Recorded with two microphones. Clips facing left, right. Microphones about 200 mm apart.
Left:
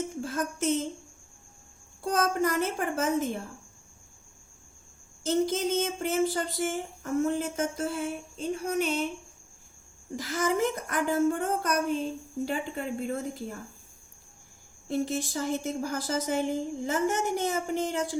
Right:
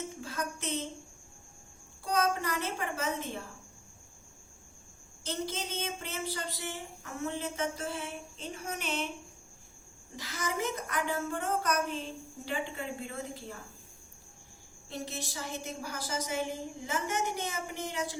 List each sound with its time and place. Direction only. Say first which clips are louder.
0.2 s a woman's voice: left 7 dB; 45° left (ahead or behind)
2.0 s speech: left 4 dB; 45° left (ahead or behind)
5.2 s speech: left 10 dB; 45° left (ahead or behind)
10.2 s speech: left 8 dB; 45° left (ahead or behind)
14.8 s speech: left 10 dB; 45° left (ahead or behind)